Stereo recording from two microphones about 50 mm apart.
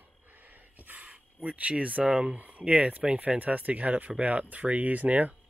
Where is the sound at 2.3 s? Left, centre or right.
Right.